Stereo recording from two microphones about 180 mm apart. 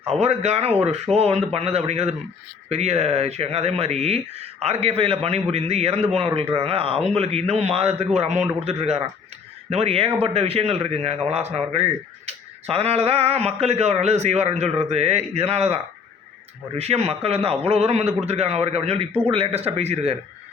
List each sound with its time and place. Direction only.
0.1 s speech: 35° right (ahead or behind)